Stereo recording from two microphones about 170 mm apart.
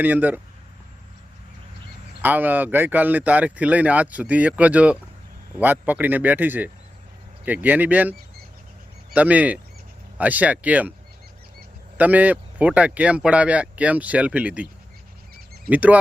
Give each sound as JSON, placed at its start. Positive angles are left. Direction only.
{"t": 0.0, "sound": "speech", "side_deg": -10}
{"t": 2.2, "sound": "speech", "side_deg": -10}
{"t": 9.1, "sound": "speech", "side_deg": -10}
{"t": 11.9, "sound": "speech", "side_deg": -10}
{"t": 15.7, "sound": "speech", "side_deg": -10}